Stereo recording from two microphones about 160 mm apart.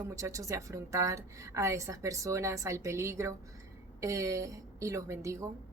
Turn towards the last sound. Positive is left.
turn(degrees=-20)  # may be behind; listen again after turning